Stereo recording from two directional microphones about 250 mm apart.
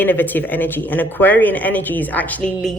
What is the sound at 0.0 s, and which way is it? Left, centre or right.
A woman's voice, centre.